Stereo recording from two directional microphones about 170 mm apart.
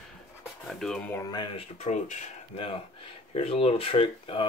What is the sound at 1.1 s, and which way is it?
Speech, 20° left (ahead or behind).